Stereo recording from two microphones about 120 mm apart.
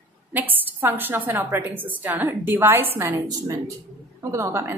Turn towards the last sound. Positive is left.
turn(degrees=-20)  # may be behind; listen again after turning